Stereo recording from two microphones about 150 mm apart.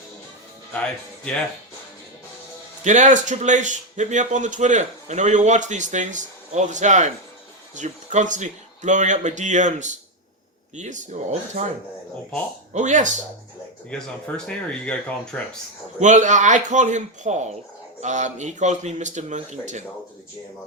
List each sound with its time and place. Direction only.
2.8 s speech: 55° right (ahead or behind)
12.7 s speech: 55° right (ahead or behind)
13.9 s speech: 5° left (ahead or behind)
16.0 s speech: 55° right (ahead or behind)